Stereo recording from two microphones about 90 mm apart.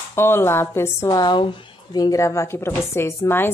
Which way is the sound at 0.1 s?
25° left (ahead or behind).